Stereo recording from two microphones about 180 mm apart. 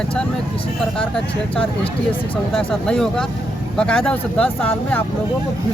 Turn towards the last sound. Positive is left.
turn(degrees=5)  # may be behind; listen again after turning